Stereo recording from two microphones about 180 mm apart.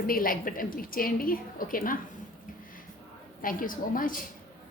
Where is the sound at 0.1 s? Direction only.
50° left (ahead or behind).